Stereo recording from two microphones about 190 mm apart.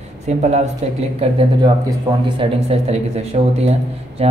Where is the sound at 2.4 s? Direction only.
35° right (ahead or behind).